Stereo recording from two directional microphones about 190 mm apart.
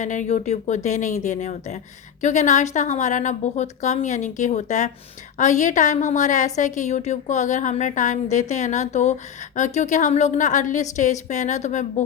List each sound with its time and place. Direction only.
0.0 s a woman's voice: 40° left (ahead or behind)